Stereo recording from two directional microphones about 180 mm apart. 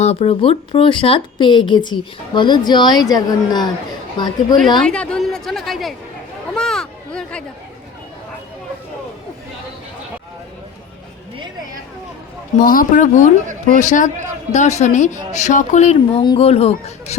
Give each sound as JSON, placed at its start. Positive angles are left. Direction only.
{"t": 0.0, "sound": "speech", "side_deg": 35}
{"t": 4.8, "sound": "a woman's voice", "side_deg": 5}
{"t": 6.5, "sound": "a sound", "side_deg": 5}
{"t": 12.5, "sound": "speech", "side_deg": 50}
{"t": 16.2, "sound": "speech", "side_deg": 30}